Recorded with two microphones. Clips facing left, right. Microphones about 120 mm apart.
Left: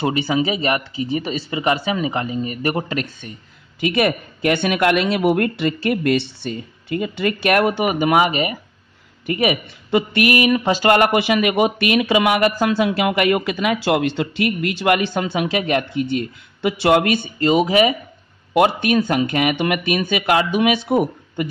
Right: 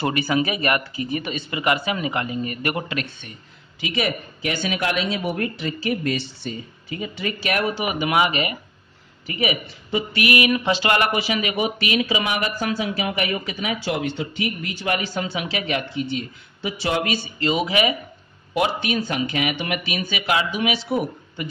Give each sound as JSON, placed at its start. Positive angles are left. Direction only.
{"t": 0.0, "sound": "speech", "side_deg": 25}
{"t": 3.8, "sound": "speech", "side_deg": 55}
{"t": 9.2, "sound": "speech", "side_deg": 55}
{"t": 18.5, "sound": "speech", "side_deg": 55}